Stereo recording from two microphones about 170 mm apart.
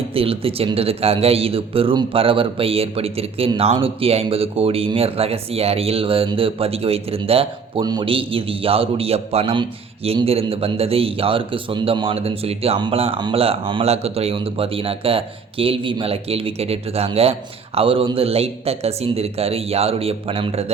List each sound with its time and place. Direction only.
0.1 s a man's voice: 35° right (ahead or behind)